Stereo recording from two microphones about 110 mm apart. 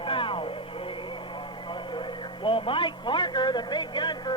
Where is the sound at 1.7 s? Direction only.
50° left (ahead or behind).